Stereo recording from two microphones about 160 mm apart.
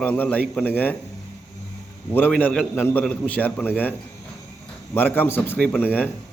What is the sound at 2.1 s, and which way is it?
A man's voice, 10° left (ahead or behind).